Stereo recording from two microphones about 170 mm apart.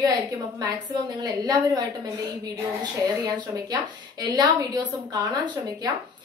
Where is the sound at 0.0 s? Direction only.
20° right (ahead or behind).